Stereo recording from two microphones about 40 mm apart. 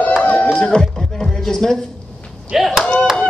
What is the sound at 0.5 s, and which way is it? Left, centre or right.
Speech, centre.